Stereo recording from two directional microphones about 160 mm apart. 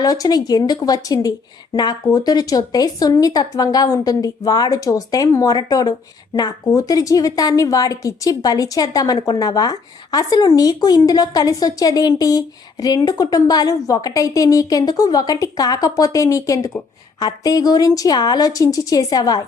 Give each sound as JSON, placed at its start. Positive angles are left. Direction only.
{"t": 0.0, "sound": "a woman's voice", "side_deg": 25}